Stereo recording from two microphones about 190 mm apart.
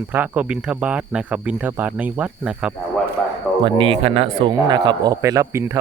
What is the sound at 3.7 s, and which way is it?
A man's voice, 25° right (ahead or behind).